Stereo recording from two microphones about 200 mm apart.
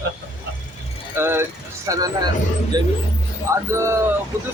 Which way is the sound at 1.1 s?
10° right (ahead or behind).